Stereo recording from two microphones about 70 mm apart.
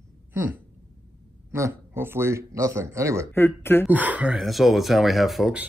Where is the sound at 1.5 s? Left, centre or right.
Right.